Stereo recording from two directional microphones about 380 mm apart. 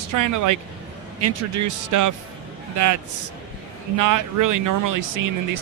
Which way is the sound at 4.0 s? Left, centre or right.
Right.